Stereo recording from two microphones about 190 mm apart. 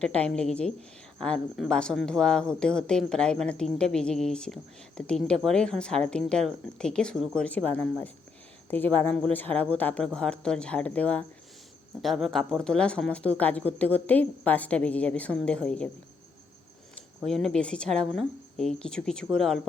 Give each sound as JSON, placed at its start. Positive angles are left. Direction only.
{"t": 0.0, "sound": "speech", "side_deg": 5}
{"t": 17.2, "sound": "speech", "side_deg": 0}